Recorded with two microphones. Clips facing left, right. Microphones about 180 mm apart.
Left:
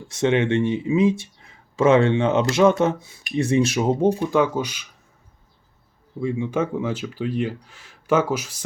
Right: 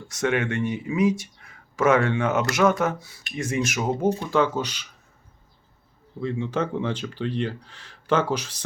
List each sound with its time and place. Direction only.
0.1 s speech: 25° left (ahead or behind)
4.2 s speech: 15° left (ahead or behind)
6.1 s speech: 10° left (ahead or behind)